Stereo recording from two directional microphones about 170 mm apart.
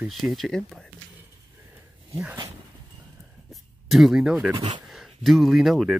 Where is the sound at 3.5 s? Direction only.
Centre (ahead or behind).